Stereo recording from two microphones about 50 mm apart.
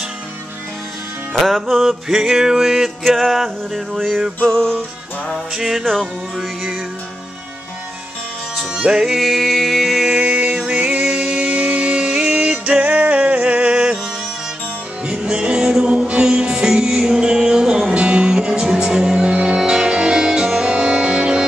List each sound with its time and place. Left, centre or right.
1.4 s music: centre
2.0 s music: centre
4.5 s music: centre
5.5 s music: centre
8.7 s music: centre
10.1 s music: right
15.0 s music: centre